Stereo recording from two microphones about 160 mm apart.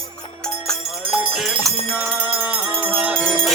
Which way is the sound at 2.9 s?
10° right (ahead or behind).